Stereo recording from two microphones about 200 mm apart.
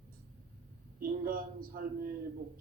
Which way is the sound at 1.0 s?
45° right (ahead or behind).